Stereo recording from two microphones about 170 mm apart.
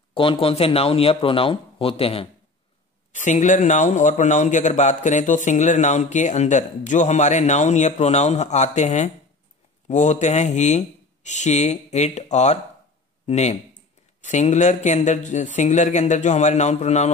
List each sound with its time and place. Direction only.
0.1 s speech: 30° left (ahead or behind)
3.1 s speech: 45° left (ahead or behind)